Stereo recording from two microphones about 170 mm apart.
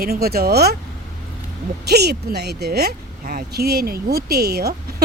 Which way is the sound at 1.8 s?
75° right (ahead or behind).